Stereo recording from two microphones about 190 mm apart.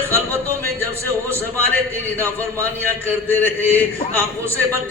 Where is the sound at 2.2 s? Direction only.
10° left (ahead or behind).